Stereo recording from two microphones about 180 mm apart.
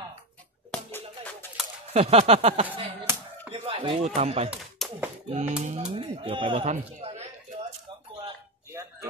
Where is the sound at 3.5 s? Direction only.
30° right (ahead or behind).